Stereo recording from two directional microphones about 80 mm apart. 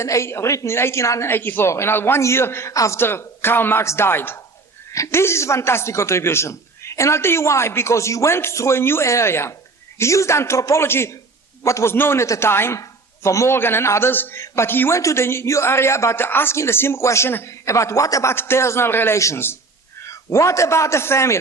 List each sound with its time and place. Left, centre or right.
0.0 s a man's voice: left